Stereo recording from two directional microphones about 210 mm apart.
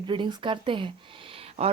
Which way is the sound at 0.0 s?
20° right (ahead or behind).